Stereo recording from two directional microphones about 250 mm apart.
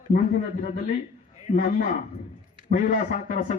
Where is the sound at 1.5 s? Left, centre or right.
Left.